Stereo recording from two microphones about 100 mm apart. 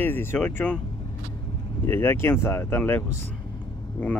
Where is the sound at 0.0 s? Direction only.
20° left (ahead or behind).